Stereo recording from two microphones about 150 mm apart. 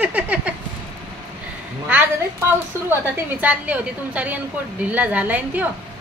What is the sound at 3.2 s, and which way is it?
A woman's voice, 10° right (ahead or behind).